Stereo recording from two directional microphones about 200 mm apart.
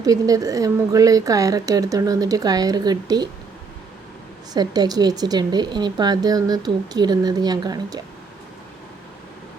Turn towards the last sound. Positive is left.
turn(degrees=-20)  # may be behind; listen again after turning